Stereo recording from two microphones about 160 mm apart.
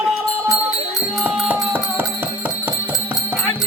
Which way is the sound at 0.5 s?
5° right (ahead or behind).